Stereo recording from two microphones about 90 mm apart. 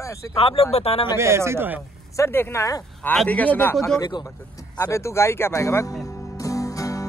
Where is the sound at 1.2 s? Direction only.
30° right (ahead or behind).